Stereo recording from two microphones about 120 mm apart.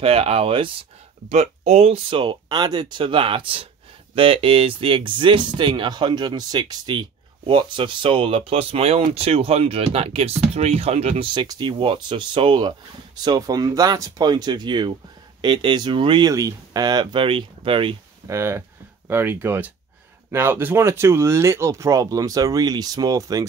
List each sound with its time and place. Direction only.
0.0 s speech: 55° right (ahead or behind)
1.3 s speech: 70° right (ahead or behind)
2.0 s speech: 45° right (ahead or behind); by 11.2 s 60° right (ahead or behind)
11.3 s speech: 35° right (ahead or behind)
16.3 s speech: 30° right (ahead or behind); by 17.9 s 45° right (ahead or behind)
18.2 s speech: 20° right (ahead or behind)